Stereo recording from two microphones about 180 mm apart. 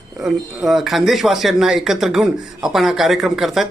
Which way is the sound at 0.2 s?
Centre (ahead or behind).